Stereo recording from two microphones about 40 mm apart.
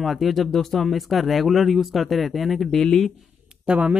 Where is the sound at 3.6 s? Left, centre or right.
Right.